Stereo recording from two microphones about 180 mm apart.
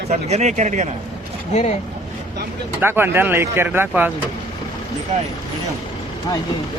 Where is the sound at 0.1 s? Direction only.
40° right (ahead or behind).